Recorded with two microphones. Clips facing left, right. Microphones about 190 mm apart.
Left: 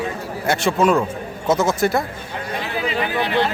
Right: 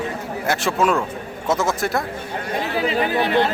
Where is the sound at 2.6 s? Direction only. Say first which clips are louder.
Right 3 dB; 45° right (ahead or behind).